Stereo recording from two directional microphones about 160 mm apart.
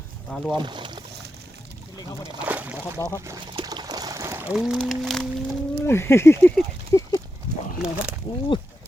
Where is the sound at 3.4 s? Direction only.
30° right (ahead or behind); by 5.6 s centre (ahead or behind).